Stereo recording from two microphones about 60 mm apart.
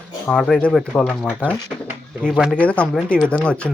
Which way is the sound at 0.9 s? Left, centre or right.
Left.